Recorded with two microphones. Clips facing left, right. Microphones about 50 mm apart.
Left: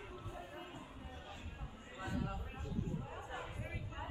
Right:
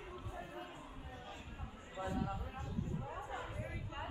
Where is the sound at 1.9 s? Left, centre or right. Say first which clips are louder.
Right 2 dB; centre.